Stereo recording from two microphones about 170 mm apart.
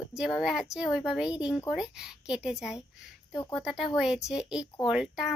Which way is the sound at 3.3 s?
15° left (ahead or behind).